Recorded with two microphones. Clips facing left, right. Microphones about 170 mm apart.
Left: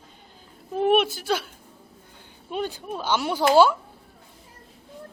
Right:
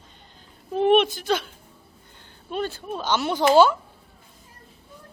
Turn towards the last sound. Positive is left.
turn(degrees=10)  # may be behind; listen again after turning